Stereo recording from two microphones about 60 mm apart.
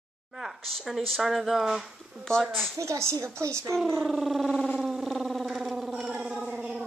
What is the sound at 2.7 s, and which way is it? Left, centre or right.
Speech, right.